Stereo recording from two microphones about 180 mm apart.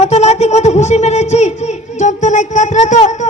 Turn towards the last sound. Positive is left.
turn(degrees=40)  # may be behind; listen again after turning